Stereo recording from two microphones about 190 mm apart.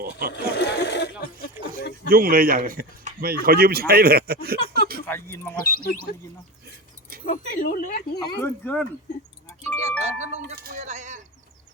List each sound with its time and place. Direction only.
0.0 s a man's voice: 50° right (ahead or behind)
0.3 s speech: 65° left (ahead or behind)
1.6 s a sound: 10° right (ahead or behind)
2.0 s a man's voice: 50° right (ahead or behind)
5.0 s speech: 10° left (ahead or behind)
5.6 s speech: 50° left (ahead or behind)
7.3 s speech: 50° left (ahead or behind)
8.2 s speech: 10° left (ahead or behind)
10.0 s speech: 35° right (ahead or behind)
10.5 s speech: 50° right (ahead or behind)